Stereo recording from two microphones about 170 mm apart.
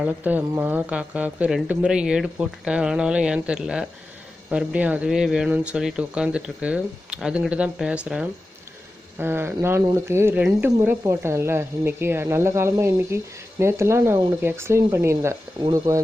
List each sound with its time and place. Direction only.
0.0 s speech: 10° right (ahead or behind)